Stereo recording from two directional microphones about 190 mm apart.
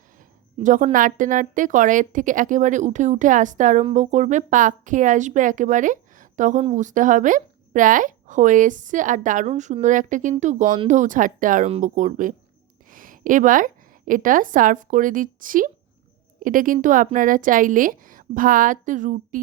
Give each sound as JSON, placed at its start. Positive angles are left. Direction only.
{"t": 0.6, "sound": "a woman's voice", "side_deg": -40}